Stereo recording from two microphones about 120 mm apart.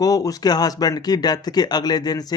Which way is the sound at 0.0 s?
30° left (ahead or behind).